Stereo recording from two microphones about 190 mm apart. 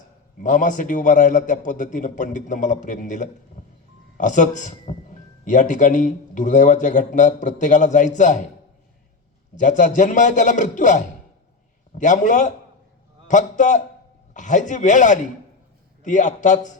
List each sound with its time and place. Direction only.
0.4 s a man's voice: 40° left (ahead or behind)
9.6 s a man's voice: 40° left (ahead or behind)